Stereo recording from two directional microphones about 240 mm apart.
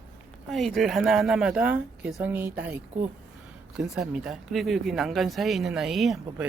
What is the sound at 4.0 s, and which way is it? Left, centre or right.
Speech, centre.